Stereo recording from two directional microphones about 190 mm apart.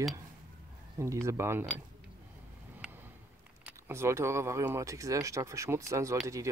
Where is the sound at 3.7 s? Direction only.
15° right (ahead or behind).